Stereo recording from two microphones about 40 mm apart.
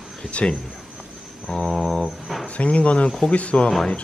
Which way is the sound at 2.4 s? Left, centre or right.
Left.